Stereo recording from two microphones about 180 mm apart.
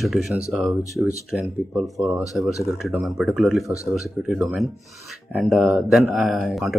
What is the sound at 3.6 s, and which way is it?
Speech, 15° left (ahead or behind).